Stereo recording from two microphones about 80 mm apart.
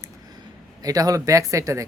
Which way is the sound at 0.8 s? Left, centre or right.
Right.